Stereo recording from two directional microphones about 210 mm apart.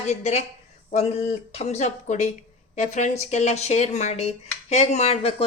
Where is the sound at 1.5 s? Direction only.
30° left (ahead or behind).